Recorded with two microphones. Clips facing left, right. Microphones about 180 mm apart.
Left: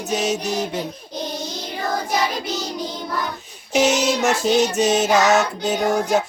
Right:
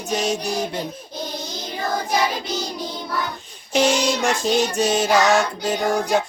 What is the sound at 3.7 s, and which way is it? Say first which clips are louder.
Music: left 1 dB; 5° left (ahead or behind).